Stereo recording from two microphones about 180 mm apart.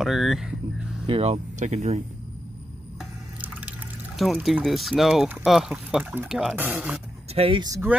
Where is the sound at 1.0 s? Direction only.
30° right (ahead or behind).